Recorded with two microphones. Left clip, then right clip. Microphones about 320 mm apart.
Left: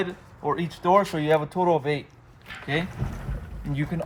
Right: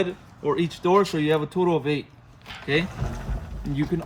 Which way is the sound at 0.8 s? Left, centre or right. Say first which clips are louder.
Left 1 dB; centre.